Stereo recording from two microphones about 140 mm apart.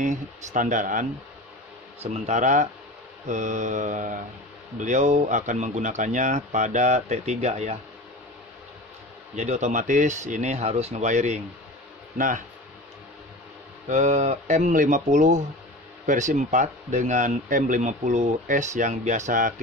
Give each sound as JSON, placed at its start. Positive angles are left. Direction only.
{"t": 0.0, "sound": "speech", "side_deg": -60}
{"t": 2.1, "sound": "speech", "side_deg": -55}
{"t": 9.3, "sound": "speech", "side_deg": -55}
{"t": 12.2, "sound": "speech", "side_deg": -65}
{"t": 13.8, "sound": "speech", "side_deg": -55}
{"t": 14.6, "sound": "speech", "side_deg": -70}